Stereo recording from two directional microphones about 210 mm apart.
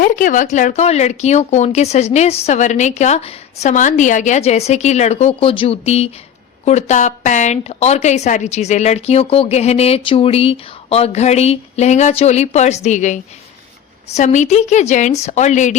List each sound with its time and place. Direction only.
0.0 s speech: 40° left (ahead or behind)